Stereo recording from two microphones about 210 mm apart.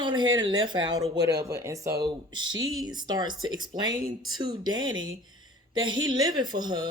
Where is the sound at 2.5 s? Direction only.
70° right (ahead or behind).